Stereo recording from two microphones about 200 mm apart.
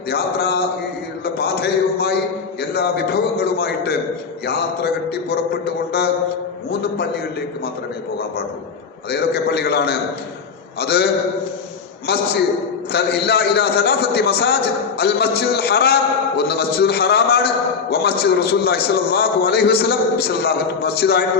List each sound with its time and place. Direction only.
0.1 s a man's voice: 55° left (ahead or behind)
9.0 s a man's voice: 55° left (ahead or behind)